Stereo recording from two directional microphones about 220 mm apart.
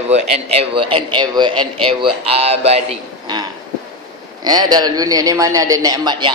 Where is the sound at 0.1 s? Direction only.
30° right (ahead or behind).